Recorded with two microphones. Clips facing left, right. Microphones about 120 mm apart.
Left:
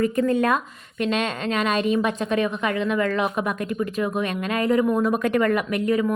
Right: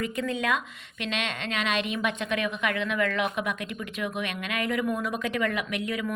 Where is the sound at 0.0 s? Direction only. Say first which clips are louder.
Left 9 dB; 45° left (ahead or behind).